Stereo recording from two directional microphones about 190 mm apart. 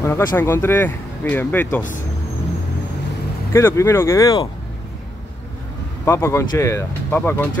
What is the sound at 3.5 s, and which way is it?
Speech, 15° left (ahead or behind).